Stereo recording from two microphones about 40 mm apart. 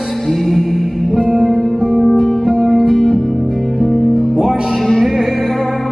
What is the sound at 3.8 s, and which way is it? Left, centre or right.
Music, centre.